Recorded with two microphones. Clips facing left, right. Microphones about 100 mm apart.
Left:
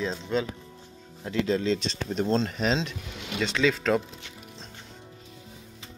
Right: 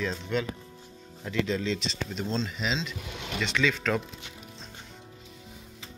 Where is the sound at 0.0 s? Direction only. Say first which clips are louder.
Left 2 dB; 25° left (ahead or behind); by 2.9 s 45° left (ahead or behind).